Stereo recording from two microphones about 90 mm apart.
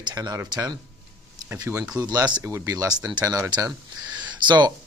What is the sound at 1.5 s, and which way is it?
Speech, 30° right (ahead or behind).